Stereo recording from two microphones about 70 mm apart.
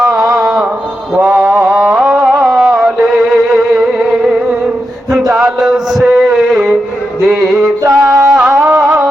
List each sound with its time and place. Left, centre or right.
0.0 s music: centre
1.1 s mantra: centre
1.8 s music: centre
5.3 s music: centre
7.9 s music: right
8.2 s music: centre